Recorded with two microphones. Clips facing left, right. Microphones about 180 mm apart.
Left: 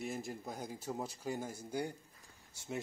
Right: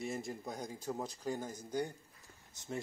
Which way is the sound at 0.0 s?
Centre (ahead or behind).